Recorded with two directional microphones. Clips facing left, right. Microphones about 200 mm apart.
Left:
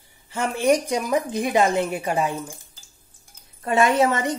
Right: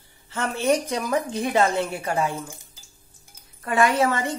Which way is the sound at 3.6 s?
25° left (ahead or behind).